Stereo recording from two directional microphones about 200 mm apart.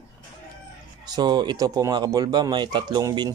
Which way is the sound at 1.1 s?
20° right (ahead or behind).